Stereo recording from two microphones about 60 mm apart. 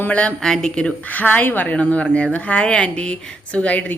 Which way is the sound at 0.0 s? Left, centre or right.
Left.